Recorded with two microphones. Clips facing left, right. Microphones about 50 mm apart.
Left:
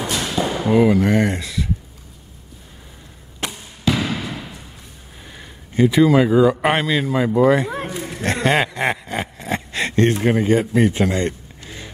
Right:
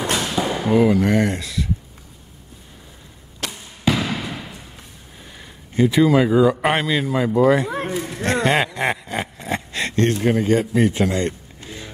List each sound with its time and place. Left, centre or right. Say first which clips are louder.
0.5 s speech: left 1 dB; centre
3.4 s arrow: left 2 dB; centre
3.9 s basketball bounce: even; centre
5.3 s speech: left 1 dB; centre